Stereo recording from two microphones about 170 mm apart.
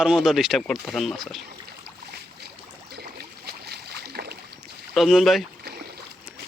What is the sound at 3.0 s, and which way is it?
Boat, 70° right (ahead or behind).